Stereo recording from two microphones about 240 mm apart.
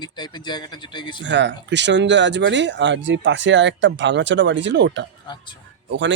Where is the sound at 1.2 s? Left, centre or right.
Right.